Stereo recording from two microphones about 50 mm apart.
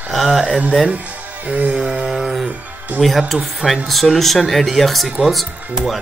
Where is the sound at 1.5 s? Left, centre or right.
Right.